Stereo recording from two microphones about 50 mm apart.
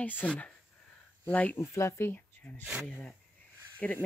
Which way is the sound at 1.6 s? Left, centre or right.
Left.